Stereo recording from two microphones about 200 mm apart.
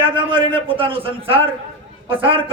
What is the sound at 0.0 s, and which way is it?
A man's voice, 25° right (ahead or behind).